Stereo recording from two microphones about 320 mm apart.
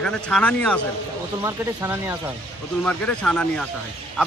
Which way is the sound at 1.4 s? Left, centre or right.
Centre.